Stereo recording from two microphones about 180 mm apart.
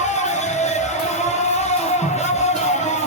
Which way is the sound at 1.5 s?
40° left (ahead or behind).